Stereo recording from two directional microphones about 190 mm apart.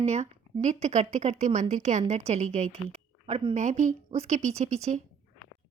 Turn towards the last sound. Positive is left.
turn(degrees=-35)  # may be behind; listen again after turning